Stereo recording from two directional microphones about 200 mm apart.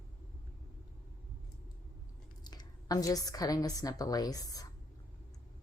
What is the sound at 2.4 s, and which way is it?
A woman's voice, 20° left (ahead or behind).